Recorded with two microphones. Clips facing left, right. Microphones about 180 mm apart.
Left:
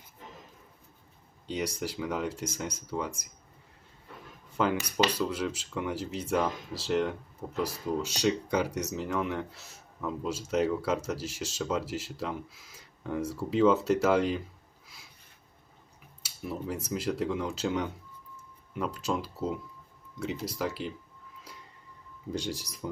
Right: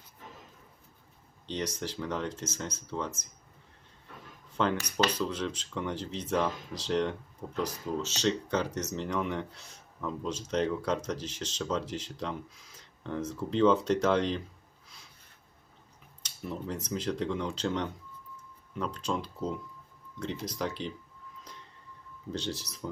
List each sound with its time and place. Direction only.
1.5 s speech: 10° left (ahead or behind)
4.5 s speech: 5° left (ahead or behind)
16.2 s speech: 5° left (ahead or behind)
21.5 s train: 10° left (ahead or behind)
22.3 s speech: 10° left (ahead or behind)